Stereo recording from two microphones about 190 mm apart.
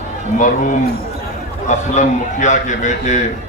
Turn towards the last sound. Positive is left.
turn(degrees=40)  # may be behind; listen again after turning